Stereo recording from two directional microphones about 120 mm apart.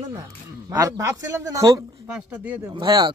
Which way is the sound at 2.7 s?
35° right (ahead or behind).